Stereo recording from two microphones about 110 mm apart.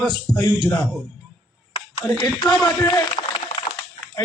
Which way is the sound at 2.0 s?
40° left (ahead or behind).